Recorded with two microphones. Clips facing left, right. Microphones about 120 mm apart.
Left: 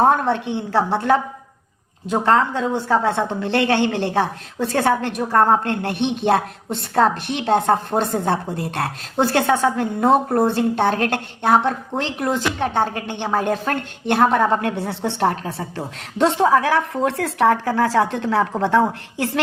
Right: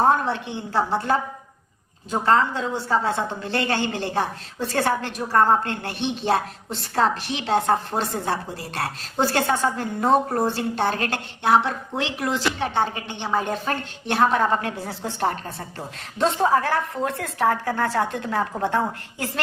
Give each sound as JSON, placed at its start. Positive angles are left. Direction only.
{"t": 0.0, "sound": "a woman's voice", "side_deg": 55}